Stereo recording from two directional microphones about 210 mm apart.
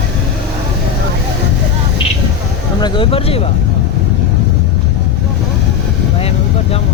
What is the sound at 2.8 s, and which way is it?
Speech, 25° left (ahead or behind).